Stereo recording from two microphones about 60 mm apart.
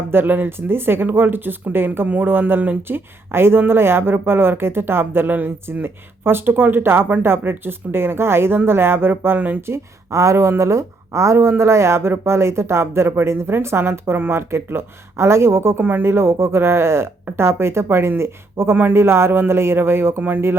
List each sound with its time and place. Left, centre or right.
0.1 s speech: right
10.1 s speech: right
15.8 s speech: right